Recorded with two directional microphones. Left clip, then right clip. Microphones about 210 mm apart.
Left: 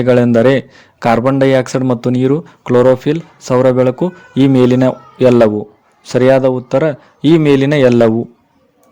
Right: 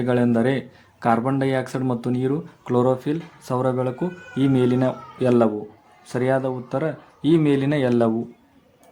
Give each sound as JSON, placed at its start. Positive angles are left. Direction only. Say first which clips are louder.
{"t": 0.0, "sound": "a man's voice", "louder": "left 11 dB", "side_deg": 40}